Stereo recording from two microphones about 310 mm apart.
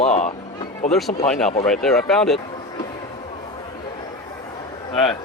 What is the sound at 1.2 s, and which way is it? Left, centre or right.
Speech, centre.